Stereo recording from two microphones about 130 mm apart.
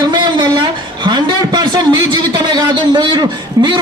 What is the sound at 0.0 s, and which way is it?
A man's voice, 35° right (ahead or behind).